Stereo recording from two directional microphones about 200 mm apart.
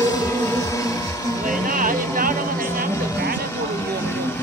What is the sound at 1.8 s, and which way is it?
Music, 45° right (ahead or behind).